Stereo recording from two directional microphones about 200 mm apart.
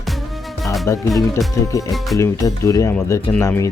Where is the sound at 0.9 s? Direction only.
Centre (ahead or behind).